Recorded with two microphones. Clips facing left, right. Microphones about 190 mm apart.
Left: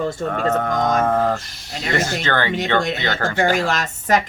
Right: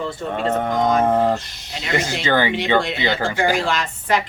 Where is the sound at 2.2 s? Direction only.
10° right (ahead or behind).